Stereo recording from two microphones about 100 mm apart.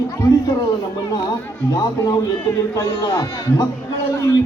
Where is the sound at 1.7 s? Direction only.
40° left (ahead or behind).